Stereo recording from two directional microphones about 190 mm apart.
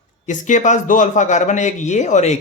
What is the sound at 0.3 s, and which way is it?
A man's voice, 40° left (ahead or behind).